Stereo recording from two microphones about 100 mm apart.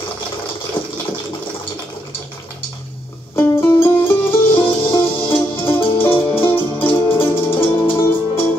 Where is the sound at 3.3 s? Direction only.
25° left (ahead or behind).